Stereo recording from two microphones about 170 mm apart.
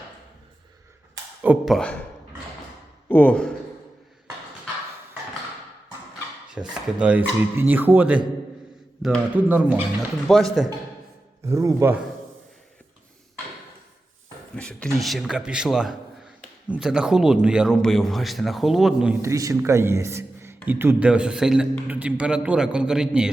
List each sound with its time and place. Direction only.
1.4 s speech: 10° right (ahead or behind)
1.7 s a man's voice: 5° left (ahead or behind)
3.1 s a man's voice: 10° left (ahead or behind)
6.5 s a man's voice: 5° right (ahead or behind)
10.2 s a man's voice: centre (ahead or behind)
11.4 s a man's voice: 15° right (ahead or behind)
14.5 s a man's voice: 5° left (ahead or behind)
19.2 s a man's voice: 20° right (ahead or behind)